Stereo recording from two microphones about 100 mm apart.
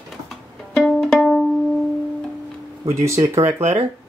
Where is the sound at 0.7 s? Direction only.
5° left (ahead or behind).